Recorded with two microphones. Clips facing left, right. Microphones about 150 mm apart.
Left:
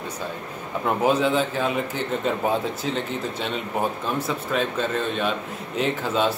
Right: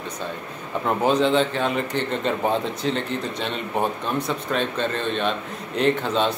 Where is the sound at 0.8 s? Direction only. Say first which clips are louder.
Right 1 dB; 5° left (ahead or behind).